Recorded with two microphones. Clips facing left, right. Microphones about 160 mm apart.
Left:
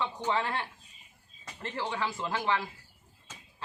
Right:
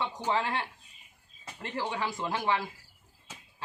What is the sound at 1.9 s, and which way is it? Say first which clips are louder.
Speech: even; 15° right (ahead or behind).